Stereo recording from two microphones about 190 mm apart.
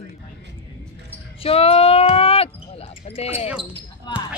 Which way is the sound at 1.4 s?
30° left (ahead or behind).